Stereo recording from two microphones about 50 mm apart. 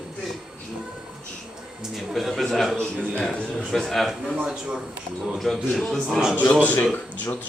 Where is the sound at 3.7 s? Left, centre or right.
Centre.